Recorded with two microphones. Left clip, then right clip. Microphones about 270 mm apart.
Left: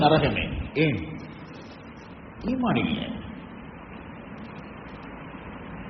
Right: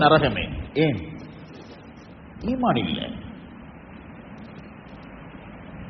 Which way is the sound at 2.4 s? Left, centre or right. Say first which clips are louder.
Right 3 dB; right.